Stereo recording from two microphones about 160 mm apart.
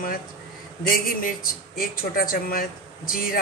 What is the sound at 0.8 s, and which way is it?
A woman's voice, 60° left (ahead or behind).